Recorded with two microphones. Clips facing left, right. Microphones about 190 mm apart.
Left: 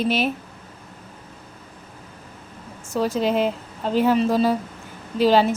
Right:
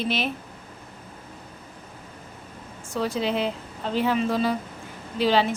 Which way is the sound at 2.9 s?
45° left (ahead or behind).